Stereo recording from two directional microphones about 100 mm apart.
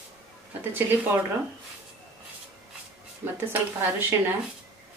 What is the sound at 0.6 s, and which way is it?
Speech, 20° right (ahead or behind).